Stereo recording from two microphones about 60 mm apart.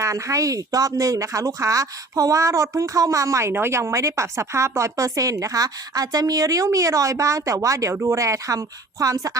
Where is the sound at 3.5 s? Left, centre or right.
Right.